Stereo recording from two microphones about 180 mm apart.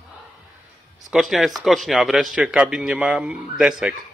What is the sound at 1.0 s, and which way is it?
A man's voice, centre (ahead or behind).